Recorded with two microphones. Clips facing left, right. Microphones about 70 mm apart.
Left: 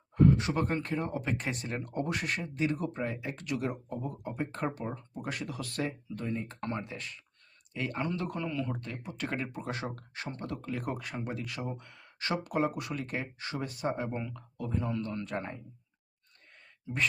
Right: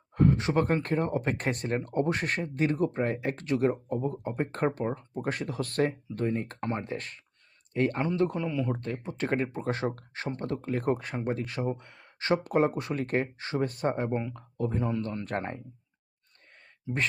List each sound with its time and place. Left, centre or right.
0.1 s speech: right
3.4 s speech: right
6.6 s speech: right
6.8 s speech: right
8.0 s speech: right
8.7 s speech: right
13.4 s speech: right
13.7 s speech: right
15.2 s speech: right